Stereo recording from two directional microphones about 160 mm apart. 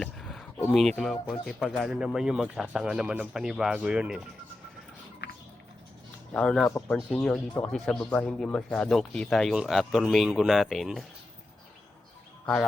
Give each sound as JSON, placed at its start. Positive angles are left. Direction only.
{"t": 0.0, "sound": "a sound", "side_deg": 0}
{"t": 0.7, "sound": "speech", "side_deg": 0}
{"t": 5.2, "sound": "a sound", "side_deg": 90}
{"t": 6.3, "sound": "speech", "side_deg": 5}
{"t": 6.7, "sound": "speech", "side_deg": 15}
{"t": 7.1, "sound": "speech", "side_deg": 5}